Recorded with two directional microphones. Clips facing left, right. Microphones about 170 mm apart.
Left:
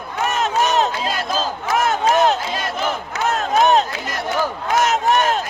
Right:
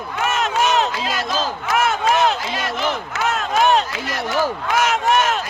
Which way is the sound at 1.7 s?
40° left (ahead or behind).